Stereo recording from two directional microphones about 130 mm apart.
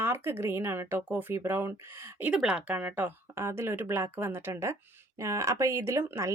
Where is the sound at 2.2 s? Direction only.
5° right (ahead or behind).